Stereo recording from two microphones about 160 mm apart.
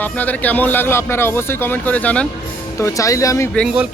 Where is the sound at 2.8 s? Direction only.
20° left (ahead or behind).